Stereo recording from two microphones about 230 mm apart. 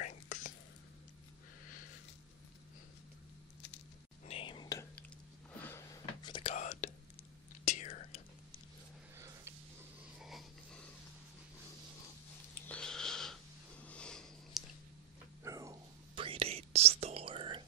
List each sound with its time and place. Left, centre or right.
0.0 s whispering: left
4.3 s whispering: left
6.5 s whispering: left
10.2 s a sound: centre
12.5 s a sound: centre
13.8 s sniff: centre
15.4 s dog: centre
16.2 s whispering: right